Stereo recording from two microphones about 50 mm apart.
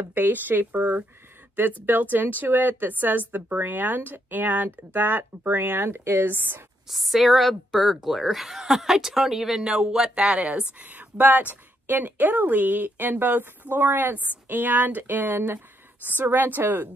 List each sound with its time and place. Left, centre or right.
0.0 s a woman's voice: right
6.9 s speech: centre
10.8 s a woman's voice: right
16.2 s a woman's voice: right